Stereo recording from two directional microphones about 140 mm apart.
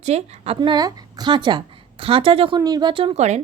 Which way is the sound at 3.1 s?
55° right (ahead or behind).